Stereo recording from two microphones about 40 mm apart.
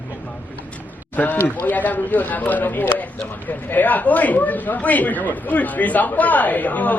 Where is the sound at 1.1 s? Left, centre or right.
Left.